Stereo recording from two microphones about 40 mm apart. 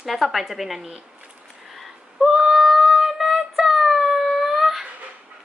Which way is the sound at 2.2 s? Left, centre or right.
Centre.